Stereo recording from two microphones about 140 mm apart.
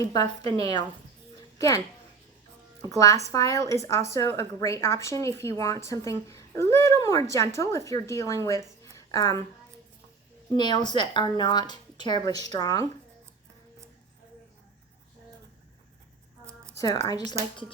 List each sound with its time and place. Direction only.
0.1 s speech: 30° left (ahead or behind)
1.4 s a sound: 25° left (ahead or behind)
2.8 s speech: 25° left (ahead or behind)
10.5 s speech: 30° left (ahead or behind)
16.7 s speech: 25° left (ahead or behind)